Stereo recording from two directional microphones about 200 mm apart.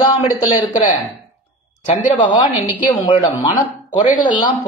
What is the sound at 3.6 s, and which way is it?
Speech, 40° left (ahead or behind).